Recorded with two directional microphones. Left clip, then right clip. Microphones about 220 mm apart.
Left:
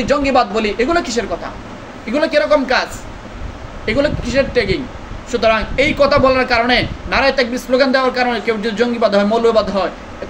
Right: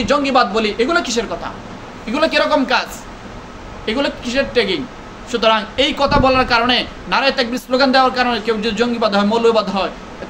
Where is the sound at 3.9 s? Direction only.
15° right (ahead or behind).